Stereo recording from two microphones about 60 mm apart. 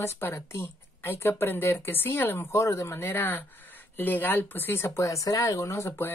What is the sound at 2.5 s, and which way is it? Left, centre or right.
Speech, left.